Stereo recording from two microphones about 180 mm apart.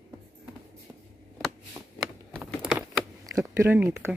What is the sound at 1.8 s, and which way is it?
Shuffling cards, 5° right (ahead or behind).